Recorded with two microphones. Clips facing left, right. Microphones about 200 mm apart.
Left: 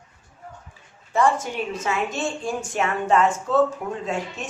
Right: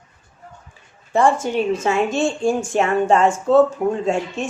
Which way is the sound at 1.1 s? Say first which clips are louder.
Right 4 dB; 30° right (ahead or behind).